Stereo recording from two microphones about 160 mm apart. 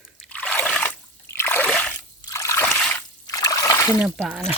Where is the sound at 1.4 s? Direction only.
15° left (ahead or behind).